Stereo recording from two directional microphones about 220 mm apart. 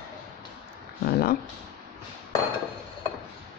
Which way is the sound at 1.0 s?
45° left (ahead or behind).